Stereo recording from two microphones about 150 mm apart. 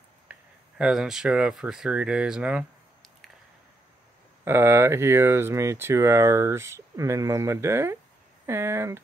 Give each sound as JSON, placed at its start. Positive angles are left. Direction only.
{"t": 0.3, "sound": "speech", "side_deg": -5}
{"t": 4.5, "sound": "speech", "side_deg": -15}